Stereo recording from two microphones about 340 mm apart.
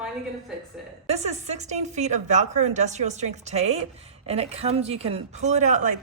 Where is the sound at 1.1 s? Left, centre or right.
Centre.